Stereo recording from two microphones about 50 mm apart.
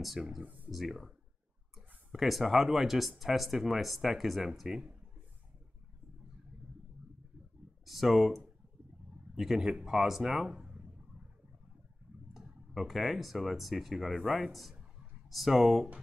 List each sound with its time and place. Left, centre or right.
0.4 s speech: right
0.7 s speech: centre
7.8 s speech: centre
9.6 s speech: centre
12.4 s speech: centre